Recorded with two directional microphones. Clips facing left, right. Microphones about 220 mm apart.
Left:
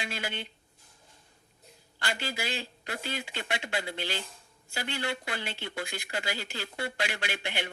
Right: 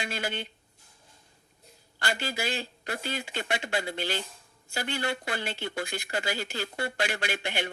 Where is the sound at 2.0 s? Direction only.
45° right (ahead or behind).